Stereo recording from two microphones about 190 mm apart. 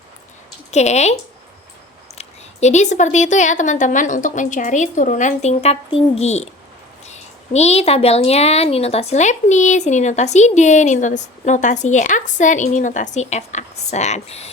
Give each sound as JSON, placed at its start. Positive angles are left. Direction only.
{"t": 0.7, "sound": "a woman's voice", "side_deg": 35}
{"t": 2.1, "sound": "a woman's voice", "side_deg": 35}